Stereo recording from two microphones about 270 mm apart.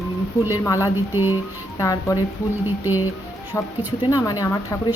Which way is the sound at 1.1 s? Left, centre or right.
Centre.